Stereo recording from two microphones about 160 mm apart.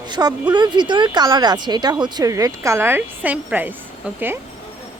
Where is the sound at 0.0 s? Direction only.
25° right (ahead or behind); by 3.8 s 10° right (ahead or behind).